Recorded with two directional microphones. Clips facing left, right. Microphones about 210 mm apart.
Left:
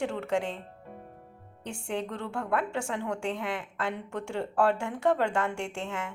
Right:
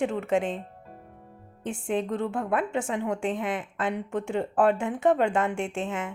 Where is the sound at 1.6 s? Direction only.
20° right (ahead or behind).